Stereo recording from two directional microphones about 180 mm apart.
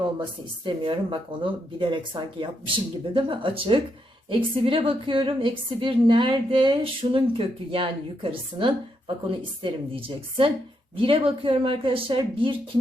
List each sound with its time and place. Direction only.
0.0 s a woman's voice: 25° right (ahead or behind)